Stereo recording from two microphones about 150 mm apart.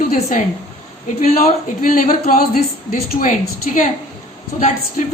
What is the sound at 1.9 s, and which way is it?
A woman's voice, 65° left (ahead or behind).